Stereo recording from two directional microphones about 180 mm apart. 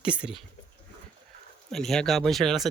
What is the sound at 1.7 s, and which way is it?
Speech, centre (ahead or behind).